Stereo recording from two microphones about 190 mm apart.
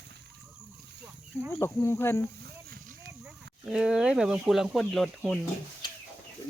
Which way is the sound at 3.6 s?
5° right (ahead or behind).